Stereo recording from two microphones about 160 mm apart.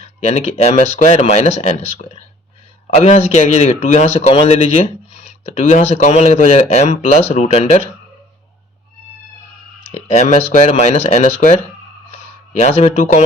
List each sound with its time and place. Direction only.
0.0 s a man's voice: 40° left (ahead or behind)
9.9 s speech: 45° left (ahead or behind)